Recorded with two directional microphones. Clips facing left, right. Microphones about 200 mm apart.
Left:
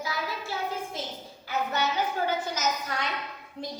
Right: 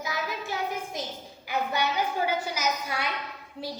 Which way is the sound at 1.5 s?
15° right (ahead or behind).